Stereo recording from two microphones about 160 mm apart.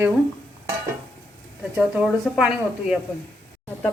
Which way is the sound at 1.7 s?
5° right (ahead or behind).